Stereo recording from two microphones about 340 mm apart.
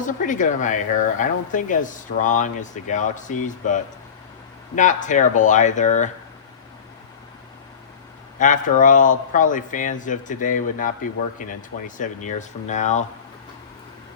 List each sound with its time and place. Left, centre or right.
0.0 s speech: left
8.4 s speech: left